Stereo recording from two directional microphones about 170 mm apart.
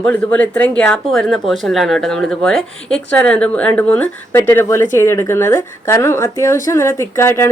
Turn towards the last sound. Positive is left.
turn(degrees=15)  # may be behind; listen again after turning